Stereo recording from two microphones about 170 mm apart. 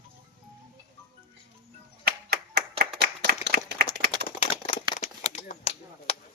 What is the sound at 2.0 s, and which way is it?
Clapping, 65° right (ahead or behind).